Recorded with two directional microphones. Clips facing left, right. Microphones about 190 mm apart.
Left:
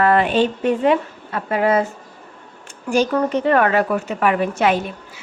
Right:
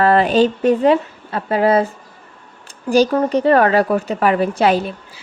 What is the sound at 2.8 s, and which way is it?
A woman's voice, 35° right (ahead or behind).